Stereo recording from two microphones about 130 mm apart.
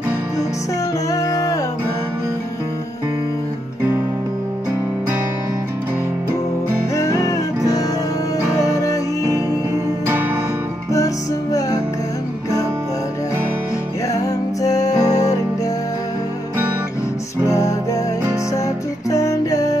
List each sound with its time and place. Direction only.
1.1 s music: 25° left (ahead or behind)
7.0 s music: 25° left (ahead or behind)
14.6 s music: 25° left (ahead or behind)
17.5 s music: 25° left (ahead or behind)
19.0 s music: 25° left (ahead or behind)